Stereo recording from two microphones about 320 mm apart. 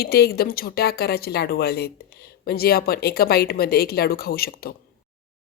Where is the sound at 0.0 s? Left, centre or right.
Left.